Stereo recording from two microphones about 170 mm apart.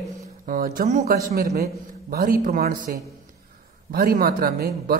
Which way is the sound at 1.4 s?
65° right (ahead or behind).